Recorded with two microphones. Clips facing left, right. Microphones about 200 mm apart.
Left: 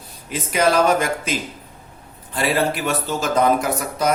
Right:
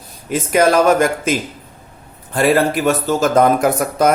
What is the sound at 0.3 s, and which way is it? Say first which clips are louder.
Speech: right 5 dB; 50° right (ahead or behind).